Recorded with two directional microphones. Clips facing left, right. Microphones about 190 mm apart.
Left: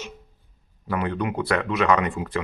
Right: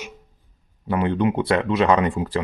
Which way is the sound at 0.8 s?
25° right (ahead or behind).